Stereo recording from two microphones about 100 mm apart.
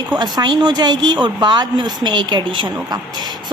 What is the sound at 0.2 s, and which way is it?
Speech, 45° right (ahead or behind).